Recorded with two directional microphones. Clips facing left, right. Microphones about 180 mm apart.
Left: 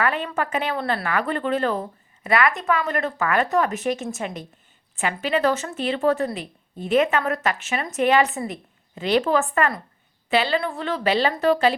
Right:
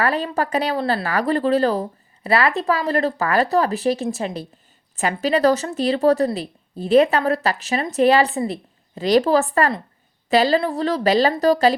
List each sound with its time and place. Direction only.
0.0 s a woman's voice: 35° right (ahead or behind)